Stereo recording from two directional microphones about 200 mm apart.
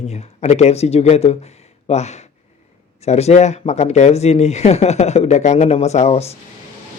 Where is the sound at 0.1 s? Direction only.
35° left (ahead or behind).